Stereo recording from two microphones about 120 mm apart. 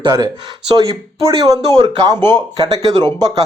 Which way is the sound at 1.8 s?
35° right (ahead or behind).